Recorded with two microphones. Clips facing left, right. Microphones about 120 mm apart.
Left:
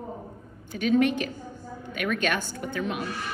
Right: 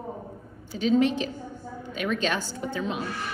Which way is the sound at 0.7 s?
60° left (ahead or behind).